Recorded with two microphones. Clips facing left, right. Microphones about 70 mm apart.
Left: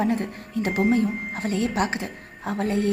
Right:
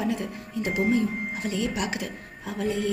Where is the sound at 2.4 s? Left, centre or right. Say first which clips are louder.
Left 3 dB; left.